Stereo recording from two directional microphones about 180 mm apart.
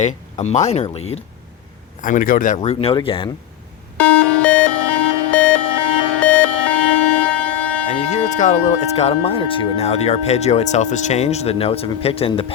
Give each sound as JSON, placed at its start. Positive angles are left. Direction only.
{"t": 0.0, "sound": "speech", "side_deg": 40}
{"t": 2.0, "sound": "speech", "side_deg": 45}
{"t": 2.6, "sound": "speech", "side_deg": 30}
{"t": 3.9, "sound": "music", "side_deg": 5}
{"t": 7.9, "sound": "speech", "side_deg": 40}